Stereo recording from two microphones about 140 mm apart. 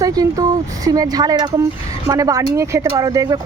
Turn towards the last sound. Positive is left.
turn(degrees=-25)  # may be behind; listen again after turning